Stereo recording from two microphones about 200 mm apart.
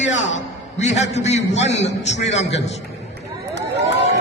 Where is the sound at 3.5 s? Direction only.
60° right (ahead or behind).